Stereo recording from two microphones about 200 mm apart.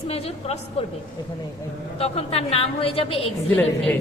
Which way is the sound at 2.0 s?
30° left (ahead or behind).